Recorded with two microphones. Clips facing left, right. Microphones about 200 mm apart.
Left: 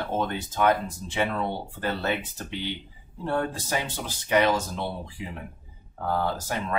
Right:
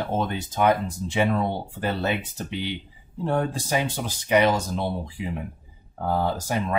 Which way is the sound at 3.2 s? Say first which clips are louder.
Right 3 dB; 15° right (ahead or behind).